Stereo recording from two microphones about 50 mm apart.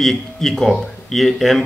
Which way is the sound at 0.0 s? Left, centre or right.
Centre.